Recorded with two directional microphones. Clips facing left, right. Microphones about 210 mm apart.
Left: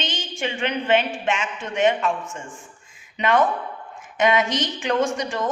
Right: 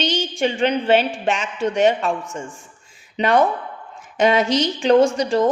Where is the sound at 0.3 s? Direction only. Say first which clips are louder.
Right 5 dB; 35° right (ahead or behind).